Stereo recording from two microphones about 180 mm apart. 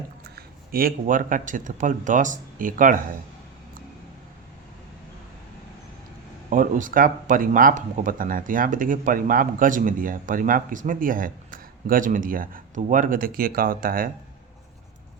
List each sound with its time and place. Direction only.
0.3 s speech: 55° right (ahead or behind)
6.5 s speech: 50° right (ahead or behind)